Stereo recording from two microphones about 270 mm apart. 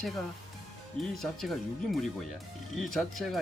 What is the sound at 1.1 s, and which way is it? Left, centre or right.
Speech, centre.